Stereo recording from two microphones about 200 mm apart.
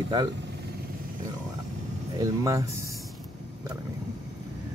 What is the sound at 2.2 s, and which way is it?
Speech, 15° right (ahead or behind).